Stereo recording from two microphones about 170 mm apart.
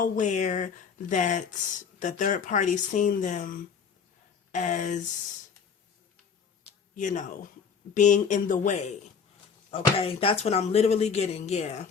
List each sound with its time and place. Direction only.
0.0 s speech: 45° left (ahead or behind)
6.9 s speech: 45° left (ahead or behind)
9.7 s speech: 35° left (ahead or behind)